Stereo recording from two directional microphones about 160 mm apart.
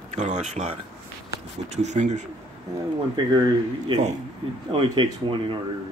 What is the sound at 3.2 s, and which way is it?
Speech, 25° right (ahead or behind).